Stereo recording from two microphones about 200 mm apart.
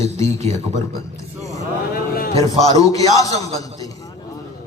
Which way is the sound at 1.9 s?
50° left (ahead or behind).